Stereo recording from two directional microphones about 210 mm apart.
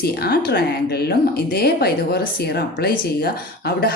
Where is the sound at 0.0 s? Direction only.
50° left (ahead or behind).